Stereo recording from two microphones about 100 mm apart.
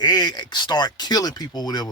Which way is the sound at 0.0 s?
45° left (ahead or behind).